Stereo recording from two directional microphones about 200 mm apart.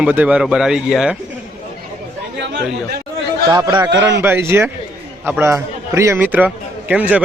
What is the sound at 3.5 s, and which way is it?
A man's voice, 20° right (ahead or behind).